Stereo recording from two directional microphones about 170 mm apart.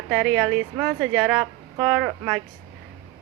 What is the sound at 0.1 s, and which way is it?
A woman's voice, centre (ahead or behind).